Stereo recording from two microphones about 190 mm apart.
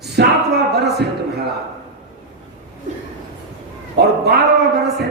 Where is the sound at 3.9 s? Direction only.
60° right (ahead or behind).